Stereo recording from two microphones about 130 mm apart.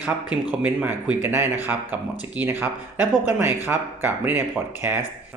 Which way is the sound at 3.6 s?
20° right (ahead or behind).